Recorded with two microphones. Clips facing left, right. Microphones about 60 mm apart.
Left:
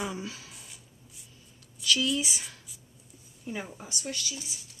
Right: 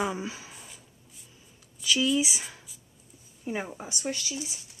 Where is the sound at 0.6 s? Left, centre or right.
Centre.